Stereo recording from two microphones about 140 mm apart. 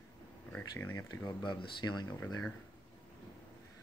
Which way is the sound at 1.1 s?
30° left (ahead or behind).